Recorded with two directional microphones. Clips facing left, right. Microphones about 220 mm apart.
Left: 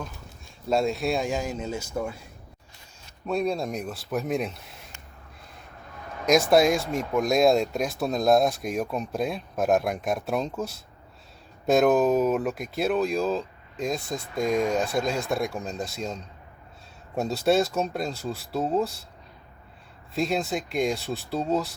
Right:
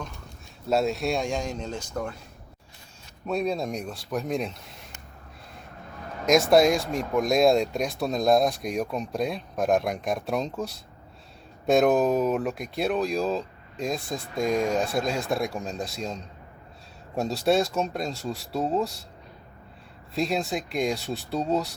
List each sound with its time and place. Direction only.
0.7 s speech: centre (ahead or behind)
3.2 s speech: centre (ahead or behind)
6.2 s speech: centre (ahead or behind)
17.2 s speech: centre (ahead or behind)
20.1 s speech: centre (ahead or behind)